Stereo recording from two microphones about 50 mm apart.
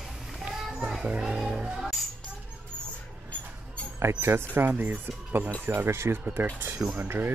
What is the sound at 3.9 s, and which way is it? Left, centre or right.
Speech, right.